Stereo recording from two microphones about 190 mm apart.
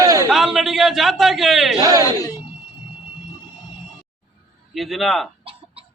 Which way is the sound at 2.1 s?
20° left (ahead or behind).